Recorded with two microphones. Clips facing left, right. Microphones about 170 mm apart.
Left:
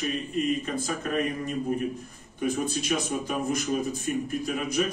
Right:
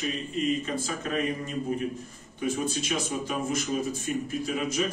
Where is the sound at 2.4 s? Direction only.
50° left (ahead or behind).